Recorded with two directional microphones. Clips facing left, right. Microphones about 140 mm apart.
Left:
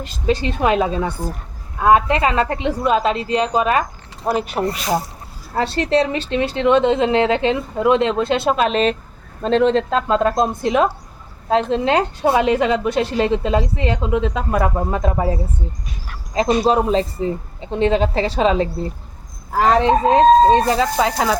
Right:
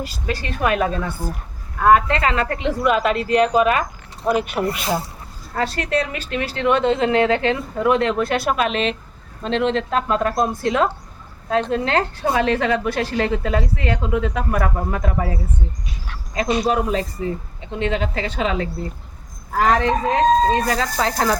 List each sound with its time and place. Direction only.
0.3 s speech: 20° left (ahead or behind)
16.3 s speech: 30° left (ahead or behind)
20.7 s speech: 15° left (ahead or behind)